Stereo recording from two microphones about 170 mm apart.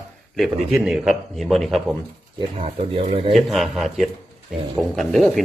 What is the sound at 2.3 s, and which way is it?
Speech, 30° right (ahead or behind).